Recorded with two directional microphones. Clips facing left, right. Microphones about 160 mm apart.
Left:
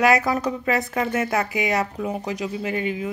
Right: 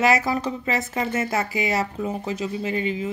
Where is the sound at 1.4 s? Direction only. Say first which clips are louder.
Left 1 dB; 10° left (ahead or behind).